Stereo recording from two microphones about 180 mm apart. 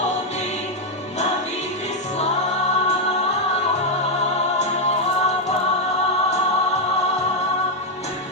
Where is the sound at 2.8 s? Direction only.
35° left (ahead or behind).